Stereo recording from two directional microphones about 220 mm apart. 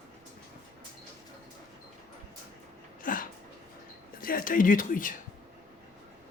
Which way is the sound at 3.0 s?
40° left (ahead or behind).